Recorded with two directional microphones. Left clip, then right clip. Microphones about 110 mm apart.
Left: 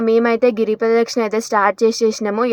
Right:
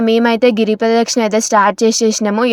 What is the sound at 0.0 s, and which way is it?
Speech, 20° right (ahead or behind).